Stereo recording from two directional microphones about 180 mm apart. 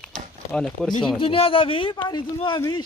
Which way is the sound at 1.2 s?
30° left (ahead or behind).